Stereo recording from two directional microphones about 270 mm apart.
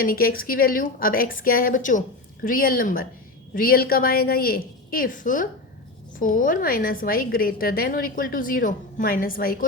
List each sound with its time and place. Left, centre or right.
0.0 s a woman's voice: left